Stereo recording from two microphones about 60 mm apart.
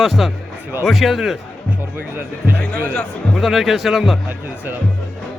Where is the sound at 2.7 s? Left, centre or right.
Centre.